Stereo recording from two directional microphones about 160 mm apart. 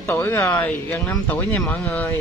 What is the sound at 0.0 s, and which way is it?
Music, 15° left (ahead or behind).